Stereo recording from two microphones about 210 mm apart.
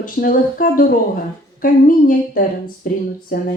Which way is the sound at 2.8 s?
40° left (ahead or behind).